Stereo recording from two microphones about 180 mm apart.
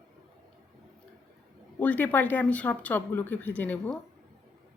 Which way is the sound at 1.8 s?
10° left (ahead or behind).